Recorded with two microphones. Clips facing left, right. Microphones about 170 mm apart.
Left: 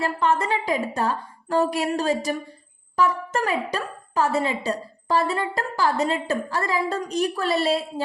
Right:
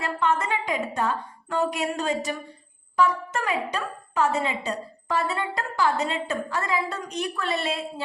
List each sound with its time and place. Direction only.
0.0 s a woman's voice: 35° left (ahead or behind)